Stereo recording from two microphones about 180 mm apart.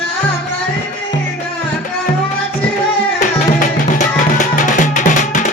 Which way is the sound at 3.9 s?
45° left (ahead or behind).